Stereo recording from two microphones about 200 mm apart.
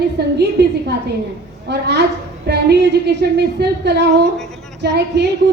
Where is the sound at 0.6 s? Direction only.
60° right (ahead or behind).